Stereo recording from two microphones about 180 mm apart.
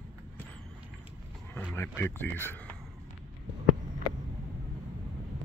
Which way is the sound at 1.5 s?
15° left (ahead or behind).